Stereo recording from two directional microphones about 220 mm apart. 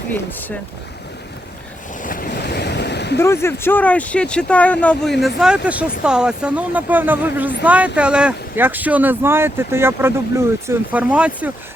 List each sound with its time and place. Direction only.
0.1 s speech: 10° left (ahead or behind)
2.0 s waves: 40° left (ahead or behind)
3.2 s speech: 10° left (ahead or behind)
5.4 s speech: 5° right (ahead or behind)